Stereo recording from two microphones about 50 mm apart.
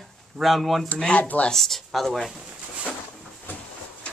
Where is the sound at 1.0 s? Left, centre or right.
Left.